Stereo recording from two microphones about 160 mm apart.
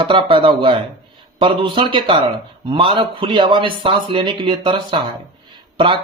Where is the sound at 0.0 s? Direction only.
30° right (ahead or behind).